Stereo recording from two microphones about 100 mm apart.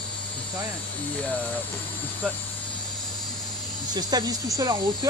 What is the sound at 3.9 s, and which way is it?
Cricket, 45° right (ahead or behind).